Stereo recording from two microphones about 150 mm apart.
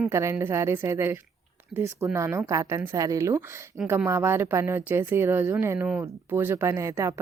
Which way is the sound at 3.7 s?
10° right (ahead or behind).